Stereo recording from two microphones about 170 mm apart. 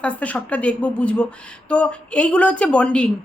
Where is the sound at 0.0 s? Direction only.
10° left (ahead or behind).